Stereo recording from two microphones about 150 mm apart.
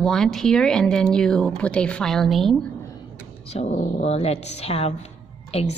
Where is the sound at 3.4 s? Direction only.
45° left (ahead or behind).